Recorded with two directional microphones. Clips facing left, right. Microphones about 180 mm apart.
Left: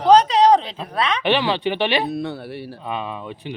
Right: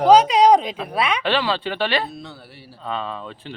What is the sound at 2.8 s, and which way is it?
Speech, 15° left (ahead or behind).